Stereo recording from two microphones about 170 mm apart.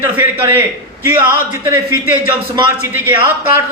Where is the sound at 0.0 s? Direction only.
15° right (ahead or behind).